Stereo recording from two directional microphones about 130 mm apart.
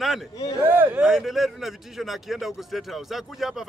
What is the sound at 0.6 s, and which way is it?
Speech, 15° right (ahead or behind).